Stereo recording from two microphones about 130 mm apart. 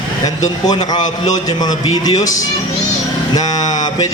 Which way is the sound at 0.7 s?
35° left (ahead or behind).